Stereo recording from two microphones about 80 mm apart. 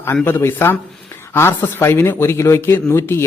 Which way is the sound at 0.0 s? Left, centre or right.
Left.